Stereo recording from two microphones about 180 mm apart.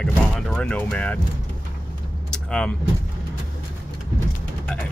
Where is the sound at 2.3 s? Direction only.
5° left (ahead or behind).